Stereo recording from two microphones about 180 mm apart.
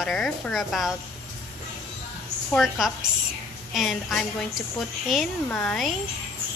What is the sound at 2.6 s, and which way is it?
A woman's voice, centre (ahead or behind).